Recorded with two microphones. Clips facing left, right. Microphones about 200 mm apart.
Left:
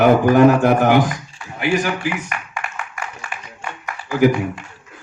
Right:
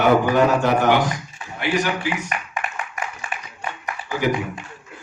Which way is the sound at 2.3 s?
20° right (ahead or behind).